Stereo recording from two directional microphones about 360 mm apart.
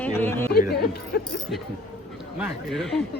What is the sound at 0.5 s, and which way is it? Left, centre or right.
Chatter, left.